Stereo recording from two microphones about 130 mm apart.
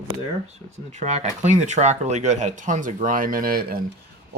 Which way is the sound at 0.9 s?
65° right (ahead or behind).